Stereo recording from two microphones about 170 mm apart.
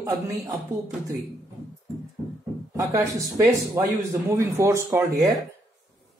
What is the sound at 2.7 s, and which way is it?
Speech, 20° right (ahead or behind).